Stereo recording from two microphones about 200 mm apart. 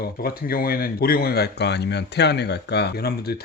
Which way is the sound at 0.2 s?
50° left (ahead or behind).